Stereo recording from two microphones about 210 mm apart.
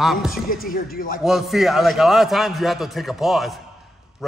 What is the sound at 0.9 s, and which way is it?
Speech, 40° left (ahead or behind).